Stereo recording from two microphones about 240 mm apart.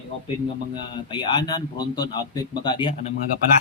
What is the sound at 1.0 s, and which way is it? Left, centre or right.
A man's voice, centre.